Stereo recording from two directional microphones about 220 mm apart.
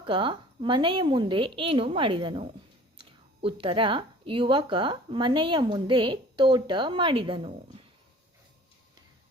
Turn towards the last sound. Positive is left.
turn(degrees=-25)  # may be behind; listen again after turning